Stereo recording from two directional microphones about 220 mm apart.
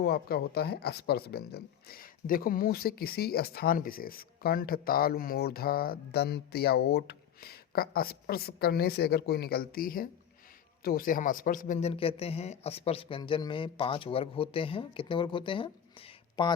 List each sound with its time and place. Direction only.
0.0 s a man's voice: 45° left (ahead or behind); by 16.6 s 20° left (ahead or behind)